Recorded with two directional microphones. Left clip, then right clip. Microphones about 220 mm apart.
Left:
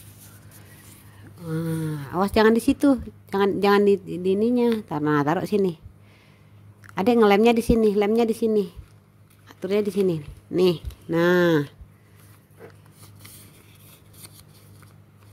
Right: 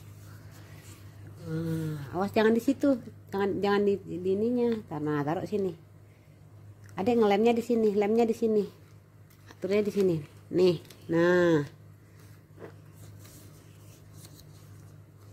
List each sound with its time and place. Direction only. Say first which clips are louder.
1.5 s speech: left 5 dB; 25° left (ahead or behind)
6.9 s speech: left 7 dB; 20° left (ahead or behind)